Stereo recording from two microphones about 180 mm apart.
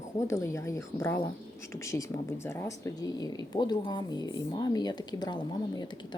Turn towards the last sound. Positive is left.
turn(degrees=25)  # may be behind; listen again after turning